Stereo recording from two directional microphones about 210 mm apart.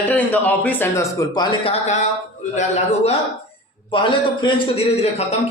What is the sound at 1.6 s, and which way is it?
A man's voice, 30° left (ahead or behind).